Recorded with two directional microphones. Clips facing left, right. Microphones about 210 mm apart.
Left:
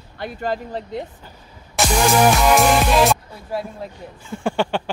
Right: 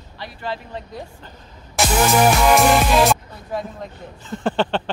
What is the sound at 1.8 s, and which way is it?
Music, centre (ahead or behind).